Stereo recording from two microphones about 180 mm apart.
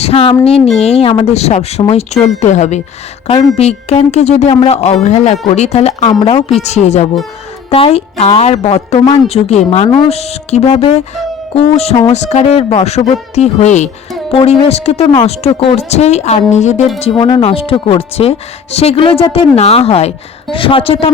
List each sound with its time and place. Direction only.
0.0 s speech: 35° left (ahead or behind)
17.0 s speech: 25° left (ahead or behind)